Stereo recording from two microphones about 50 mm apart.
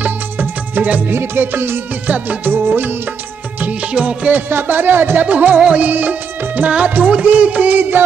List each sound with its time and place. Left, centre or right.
0.0 s music: right
1.1 s speech: right
3.9 s music: right
4.3 s speech: right
5.2 s music: right